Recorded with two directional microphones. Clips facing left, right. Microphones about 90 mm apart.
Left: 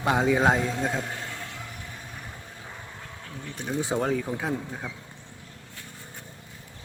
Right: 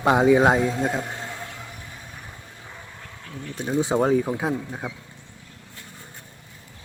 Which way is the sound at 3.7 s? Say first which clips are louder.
Right 6 dB; 25° right (ahead or behind).